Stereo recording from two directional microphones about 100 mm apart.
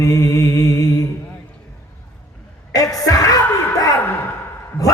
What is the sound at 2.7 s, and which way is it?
Music, 35° left (ahead or behind).